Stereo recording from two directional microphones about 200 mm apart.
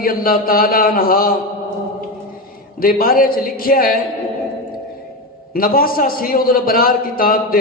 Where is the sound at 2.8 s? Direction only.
45° left (ahead or behind).